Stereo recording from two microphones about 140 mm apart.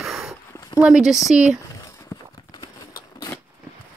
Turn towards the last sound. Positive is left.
turn(degrees=30)  # may be behind; listen again after turning